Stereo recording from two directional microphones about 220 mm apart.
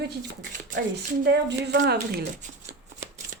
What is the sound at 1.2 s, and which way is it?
Speech, 50° right (ahead or behind).